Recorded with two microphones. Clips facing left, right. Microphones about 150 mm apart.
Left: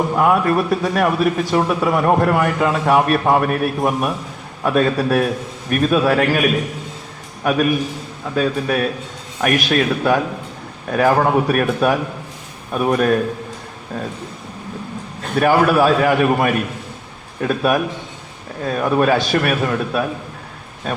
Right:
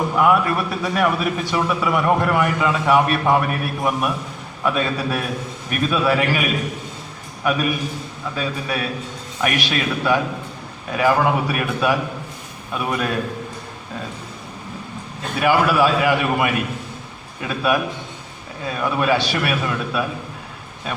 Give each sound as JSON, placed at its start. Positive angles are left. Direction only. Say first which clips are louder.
{"t": 0.2, "sound": "a man's voice", "louder": "left 1 dB", "side_deg": 35}
{"t": 7.4, "sound": "a man's voice", "louder": "left 4 dB", "side_deg": 45}
{"t": 10.9, "sound": "a man's voice", "louder": "left 3 dB", "side_deg": 40}
{"t": 15.4, "sound": "a man's voice", "louder": "left 3 dB", "side_deg": 45}